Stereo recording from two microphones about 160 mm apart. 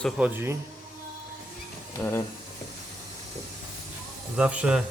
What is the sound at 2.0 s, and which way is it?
Speech, 15° left (ahead or behind).